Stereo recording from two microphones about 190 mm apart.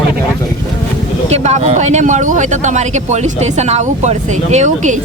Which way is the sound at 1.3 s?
35° right (ahead or behind).